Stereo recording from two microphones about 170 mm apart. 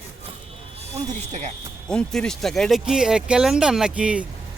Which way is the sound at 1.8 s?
5° left (ahead or behind).